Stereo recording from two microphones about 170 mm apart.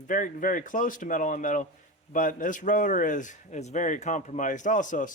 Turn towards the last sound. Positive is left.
turn(degrees=50)  # may be behind; listen again after turning